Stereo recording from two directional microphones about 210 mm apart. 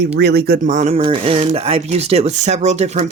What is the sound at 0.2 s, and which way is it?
Speech, 50° right (ahead or behind).